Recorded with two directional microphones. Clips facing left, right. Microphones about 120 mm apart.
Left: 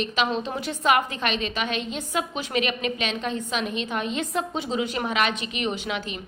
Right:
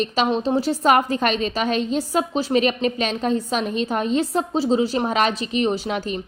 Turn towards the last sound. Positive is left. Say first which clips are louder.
# right 6 dB
turn(degrees=-40)  # may be behind; listen again after turning